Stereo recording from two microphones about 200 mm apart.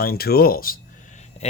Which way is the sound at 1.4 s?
35° left (ahead or behind).